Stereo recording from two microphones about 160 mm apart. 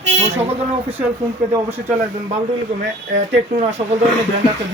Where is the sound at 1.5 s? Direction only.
15° right (ahead or behind).